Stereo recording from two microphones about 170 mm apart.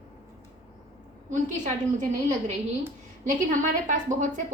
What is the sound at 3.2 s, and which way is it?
A woman's voice, 50° right (ahead or behind).